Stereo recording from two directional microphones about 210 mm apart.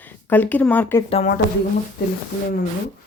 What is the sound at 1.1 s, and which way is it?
Speech, 30° left (ahead or behind).